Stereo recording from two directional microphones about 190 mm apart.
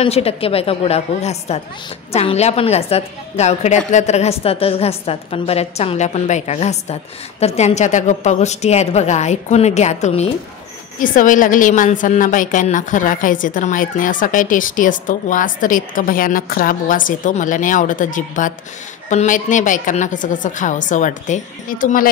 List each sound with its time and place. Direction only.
0.0 s a woman's voice: 30° left (ahead or behind)
11.0 s a woman's voice: 45° left (ahead or behind)